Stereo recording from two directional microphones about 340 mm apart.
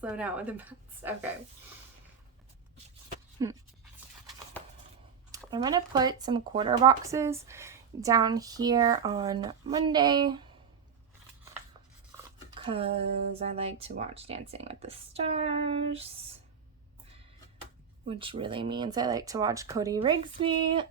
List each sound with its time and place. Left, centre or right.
0.0 s a woman's voice: centre
3.4 s speech: centre
5.5 s speech: centre
12.5 s a sound: centre
13.4 s speech: centre
18.1 s speech: centre